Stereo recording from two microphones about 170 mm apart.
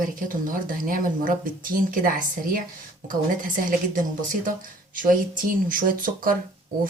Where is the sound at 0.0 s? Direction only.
55° right (ahead or behind).